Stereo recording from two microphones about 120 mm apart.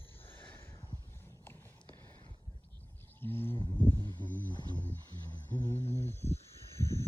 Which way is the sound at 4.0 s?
40° right (ahead or behind).